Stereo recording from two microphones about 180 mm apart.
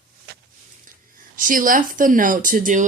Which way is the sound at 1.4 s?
50° right (ahead or behind).